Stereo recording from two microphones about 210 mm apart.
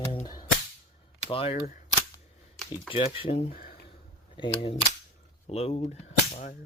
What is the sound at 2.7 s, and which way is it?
Speech, 25° left (ahead or behind).